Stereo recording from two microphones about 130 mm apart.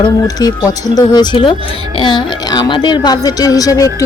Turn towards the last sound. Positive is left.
turn(degrees=25)  # may be behind; listen again after turning